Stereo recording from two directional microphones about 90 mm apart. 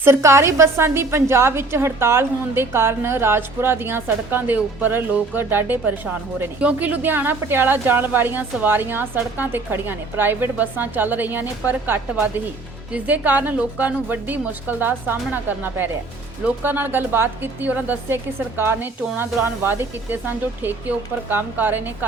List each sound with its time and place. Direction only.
0.0 s a woman's voice: 30° right (ahead or behind)